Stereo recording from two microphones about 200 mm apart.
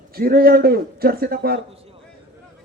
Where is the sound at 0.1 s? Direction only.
50° right (ahead or behind).